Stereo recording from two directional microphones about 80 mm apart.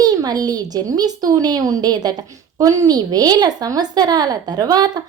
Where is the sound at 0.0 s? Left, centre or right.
Right.